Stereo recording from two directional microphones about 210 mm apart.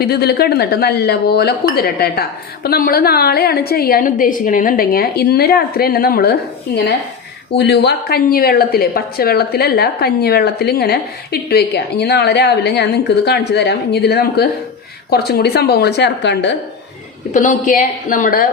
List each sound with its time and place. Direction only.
0.0 s a woman's voice: 50° left (ahead or behind)
7.5 s a woman's voice: 55° left (ahead or behind)
17.3 s a woman's voice: 40° left (ahead or behind)